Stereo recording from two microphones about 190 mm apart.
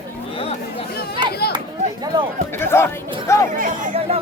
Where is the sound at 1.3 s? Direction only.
55° left (ahead or behind).